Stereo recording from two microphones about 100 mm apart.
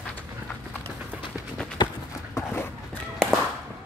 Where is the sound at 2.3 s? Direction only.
25° left (ahead or behind).